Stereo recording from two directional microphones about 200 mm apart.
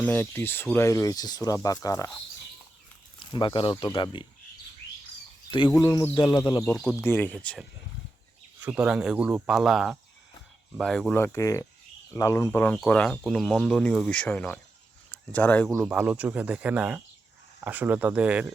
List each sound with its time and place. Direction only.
0.0 s speech: 10° left (ahead or behind)
3.2 s speech: 25° left (ahead or behind)
5.5 s speech: 25° left (ahead or behind)
6.7 s speech: 5° left (ahead or behind)
15.8 s speech: 5° right (ahead or behind)